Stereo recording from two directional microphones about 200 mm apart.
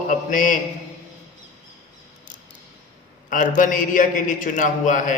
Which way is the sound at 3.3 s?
40° left (ahead or behind).